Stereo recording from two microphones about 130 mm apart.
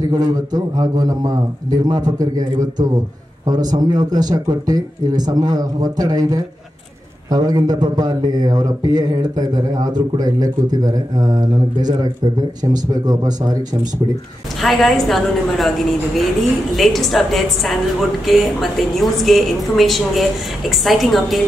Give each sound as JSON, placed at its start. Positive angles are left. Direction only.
{"t": 0.1, "sound": "a man's voice", "side_deg": -30}
{"t": 14.6, "sound": "a woman's voice", "side_deg": 0}
{"t": 16.7, "sound": "a woman's voice", "side_deg": 0}